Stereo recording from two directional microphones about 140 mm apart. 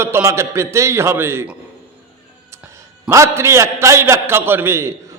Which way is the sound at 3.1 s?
20° right (ahead or behind).